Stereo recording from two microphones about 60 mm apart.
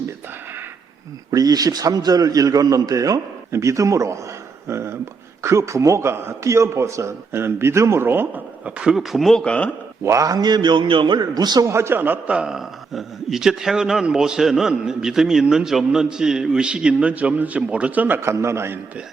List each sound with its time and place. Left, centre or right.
1.3 s a man's voice: right
3.5 s speech: right
4.7 s a man's voice: right
8.6 s speech: centre
9.3 s speech: centre
10.0 s speech: right
11.7 s a man's voice: right
12.3 s a man's voice: centre
12.5 s a man's voice: centre; by 18.2 s right
18.2 s a man's voice: right